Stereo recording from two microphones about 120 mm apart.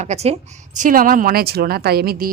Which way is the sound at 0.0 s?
70° right (ahead or behind).